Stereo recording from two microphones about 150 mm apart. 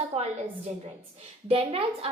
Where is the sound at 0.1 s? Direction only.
45° right (ahead or behind).